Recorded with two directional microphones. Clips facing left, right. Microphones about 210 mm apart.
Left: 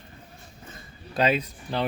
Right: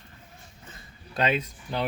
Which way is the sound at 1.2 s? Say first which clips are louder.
Left 1 dB; 35° left (ahead or behind).